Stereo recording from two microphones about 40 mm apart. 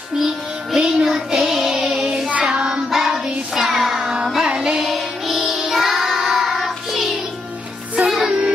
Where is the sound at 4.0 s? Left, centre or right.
Right.